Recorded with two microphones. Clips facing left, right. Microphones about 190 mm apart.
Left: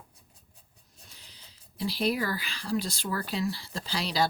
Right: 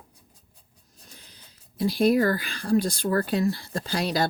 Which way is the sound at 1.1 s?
50° right (ahead or behind).